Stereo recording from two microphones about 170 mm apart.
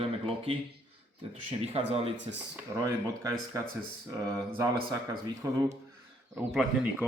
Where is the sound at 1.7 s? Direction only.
35° right (ahead or behind).